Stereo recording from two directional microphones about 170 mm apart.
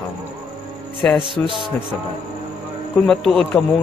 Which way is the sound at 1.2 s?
30° right (ahead or behind).